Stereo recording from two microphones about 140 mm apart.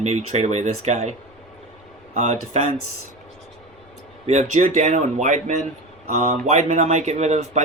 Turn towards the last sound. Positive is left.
turn(degrees=-55)  # may be behind; listen again after turning